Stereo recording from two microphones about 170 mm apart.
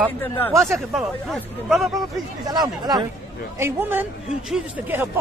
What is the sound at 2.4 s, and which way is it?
Speech, 25° right (ahead or behind).